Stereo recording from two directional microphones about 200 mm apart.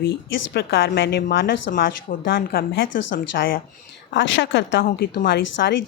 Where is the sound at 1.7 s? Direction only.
45° left (ahead or behind).